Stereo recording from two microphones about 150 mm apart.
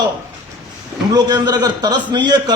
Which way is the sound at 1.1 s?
25° right (ahead or behind).